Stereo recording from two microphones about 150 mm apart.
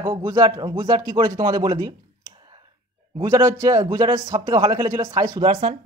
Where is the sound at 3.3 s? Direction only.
20° right (ahead or behind).